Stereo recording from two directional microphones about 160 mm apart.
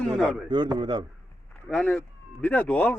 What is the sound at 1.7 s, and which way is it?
A man's voice, 5° left (ahead or behind).